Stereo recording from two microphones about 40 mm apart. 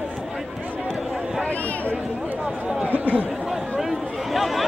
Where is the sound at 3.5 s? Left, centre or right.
Centre.